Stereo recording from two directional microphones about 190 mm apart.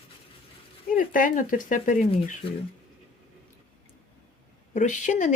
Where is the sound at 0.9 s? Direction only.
45° left (ahead or behind).